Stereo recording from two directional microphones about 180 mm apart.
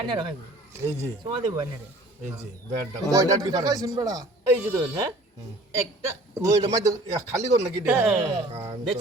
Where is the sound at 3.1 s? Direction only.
20° right (ahead or behind).